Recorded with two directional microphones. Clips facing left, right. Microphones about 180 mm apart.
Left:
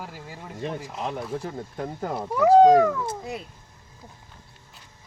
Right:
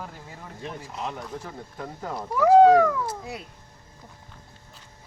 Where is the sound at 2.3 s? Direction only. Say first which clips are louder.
Even; 20° left (ahead or behind).